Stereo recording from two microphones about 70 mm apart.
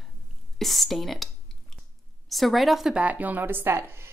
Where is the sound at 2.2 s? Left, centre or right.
Centre.